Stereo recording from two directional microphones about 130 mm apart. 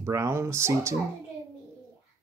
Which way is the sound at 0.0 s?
20° right (ahead or behind).